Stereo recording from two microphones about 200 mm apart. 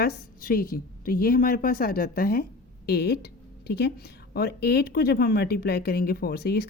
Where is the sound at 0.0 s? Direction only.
45° left (ahead or behind).